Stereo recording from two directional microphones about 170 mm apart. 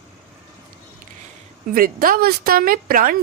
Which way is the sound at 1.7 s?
60° right (ahead or behind).